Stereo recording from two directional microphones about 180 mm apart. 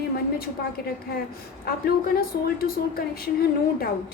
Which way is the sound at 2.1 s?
55° left (ahead or behind).